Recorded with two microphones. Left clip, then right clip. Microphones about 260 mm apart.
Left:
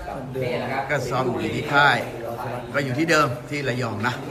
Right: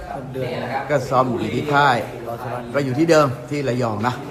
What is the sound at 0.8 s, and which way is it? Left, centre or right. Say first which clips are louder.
A man's voice: right 5 dB; centre.